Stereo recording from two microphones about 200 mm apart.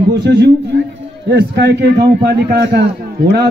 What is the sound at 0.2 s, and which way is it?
A man's voice, 60° right (ahead or behind).